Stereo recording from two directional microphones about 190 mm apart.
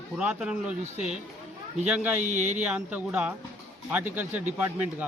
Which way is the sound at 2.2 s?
40° right (ahead or behind).